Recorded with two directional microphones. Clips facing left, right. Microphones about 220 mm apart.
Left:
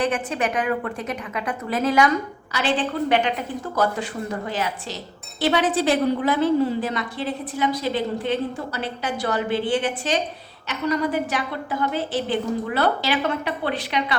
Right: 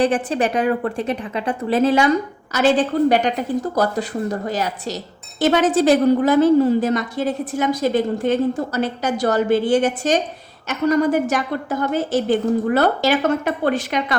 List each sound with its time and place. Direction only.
0.0 s a woman's voice: 35° right (ahead or behind)
2.5 s a woman's voice: 45° right (ahead or behind)